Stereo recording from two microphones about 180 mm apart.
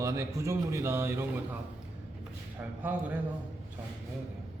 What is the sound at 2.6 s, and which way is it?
Speech, 10° right (ahead or behind).